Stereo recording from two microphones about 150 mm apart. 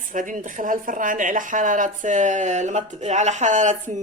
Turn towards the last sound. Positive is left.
turn(degrees=-55)  # may be behind; listen again after turning